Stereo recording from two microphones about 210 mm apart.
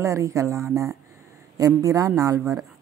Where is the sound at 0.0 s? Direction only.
15° right (ahead or behind).